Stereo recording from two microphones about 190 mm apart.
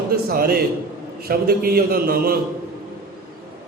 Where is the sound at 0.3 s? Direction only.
50° right (ahead or behind).